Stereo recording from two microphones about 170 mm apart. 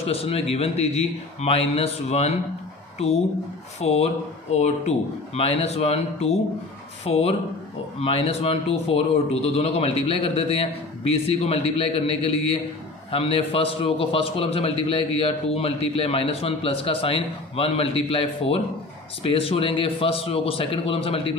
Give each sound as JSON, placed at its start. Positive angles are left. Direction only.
{"t": 0.1, "sound": "a man's voice", "side_deg": 35}
{"t": 3.8, "sound": "a man's voice", "side_deg": 35}